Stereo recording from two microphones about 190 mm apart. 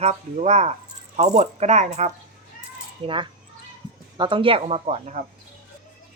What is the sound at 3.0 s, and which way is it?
Speech, 25° right (ahead or behind).